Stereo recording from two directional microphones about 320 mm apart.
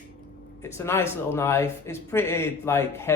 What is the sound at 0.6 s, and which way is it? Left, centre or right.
Speech, centre.